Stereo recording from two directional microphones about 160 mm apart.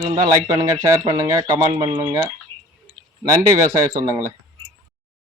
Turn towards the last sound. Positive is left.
turn(degrees=-20)  # may be behind; listen again after turning